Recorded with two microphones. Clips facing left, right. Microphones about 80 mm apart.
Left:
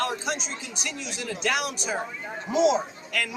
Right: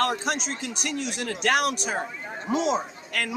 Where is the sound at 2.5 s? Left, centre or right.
Right.